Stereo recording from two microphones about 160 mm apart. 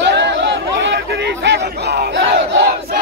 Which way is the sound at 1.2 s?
90° right.